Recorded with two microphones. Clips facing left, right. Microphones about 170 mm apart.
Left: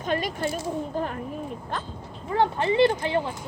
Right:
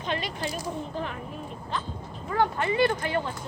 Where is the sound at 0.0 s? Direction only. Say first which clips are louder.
Left 4 dB; 45° left (ahead or behind).